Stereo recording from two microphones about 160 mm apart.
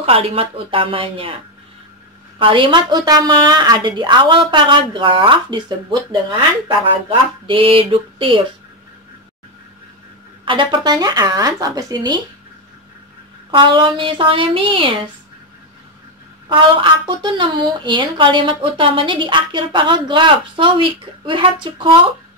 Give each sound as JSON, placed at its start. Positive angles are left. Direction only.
{"t": 0.0, "sound": "a woman's voice", "side_deg": -35}
{"t": 10.4, "sound": "a woman's voice", "side_deg": -30}
{"t": 13.5, "sound": "a woman's voice", "side_deg": -30}
{"t": 16.4, "sound": "a woman's voice", "side_deg": -30}